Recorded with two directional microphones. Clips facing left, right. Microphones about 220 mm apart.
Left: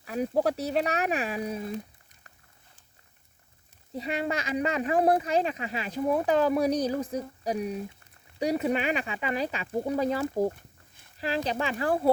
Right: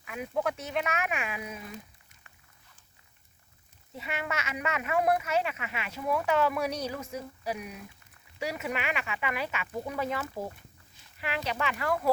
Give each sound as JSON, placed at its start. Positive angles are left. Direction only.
{"t": 0.0, "sound": "speech", "side_deg": 35}
{"t": 3.9, "sound": "speech", "side_deg": 35}